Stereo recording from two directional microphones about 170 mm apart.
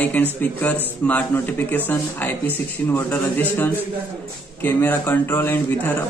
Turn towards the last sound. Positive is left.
turn(degrees=10)  # may be behind; listen again after turning